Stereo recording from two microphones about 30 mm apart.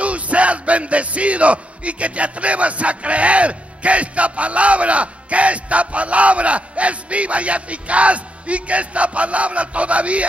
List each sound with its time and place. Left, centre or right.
0.0 s speech: right